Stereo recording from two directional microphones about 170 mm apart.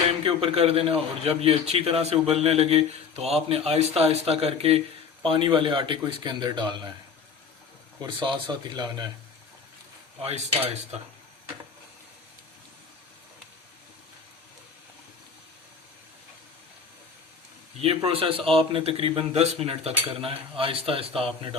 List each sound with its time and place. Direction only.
0.3 s a man's voice: 35° right (ahead or behind)
8.0 s speech: 30° right (ahead or behind)
17.7 s a man's voice: 35° right (ahead or behind)